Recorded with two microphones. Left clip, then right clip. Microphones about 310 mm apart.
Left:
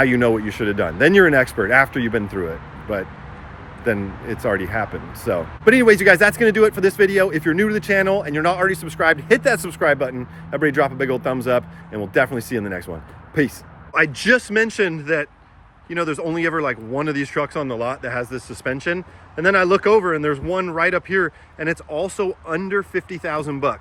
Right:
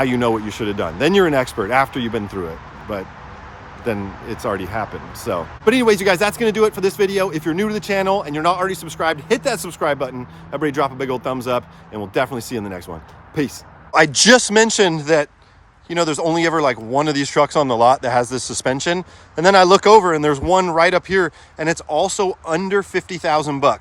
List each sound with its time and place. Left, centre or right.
0.0 s speech: centre
3.8 s speech: centre
13.9 s speech: centre